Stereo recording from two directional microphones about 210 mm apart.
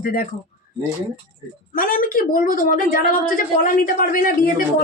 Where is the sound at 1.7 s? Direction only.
40° left (ahead or behind).